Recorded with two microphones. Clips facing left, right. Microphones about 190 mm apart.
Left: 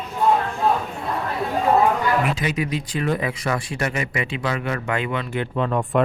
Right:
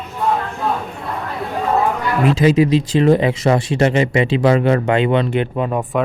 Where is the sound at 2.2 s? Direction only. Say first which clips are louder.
Right 11 dB; 25° right (ahead or behind).